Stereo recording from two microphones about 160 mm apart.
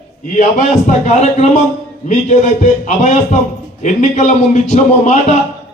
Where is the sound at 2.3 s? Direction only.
50° left (ahead or behind).